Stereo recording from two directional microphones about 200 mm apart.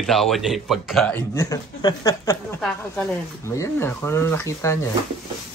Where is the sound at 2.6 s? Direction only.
5° left (ahead or behind).